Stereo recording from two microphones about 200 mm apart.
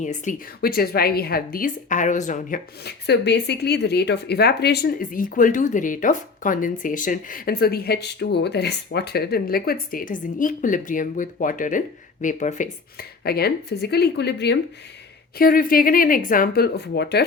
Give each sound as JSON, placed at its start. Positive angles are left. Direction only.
{"t": 0.0, "sound": "speech", "side_deg": 40}
{"t": 2.8, "sound": "speech", "side_deg": 55}
{"t": 15.4, "sound": "speech", "side_deg": 45}